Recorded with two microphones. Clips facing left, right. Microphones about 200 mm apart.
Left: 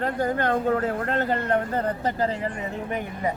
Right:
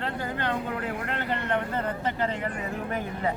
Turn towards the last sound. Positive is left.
turn(degrees=15)  # may be behind; listen again after turning